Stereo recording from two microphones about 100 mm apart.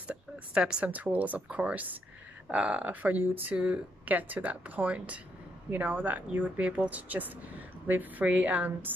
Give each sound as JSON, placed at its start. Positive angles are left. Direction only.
{"t": 0.1, "sound": "speech", "side_deg": -10}